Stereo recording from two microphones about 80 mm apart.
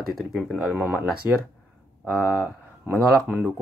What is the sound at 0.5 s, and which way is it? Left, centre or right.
Speech, centre.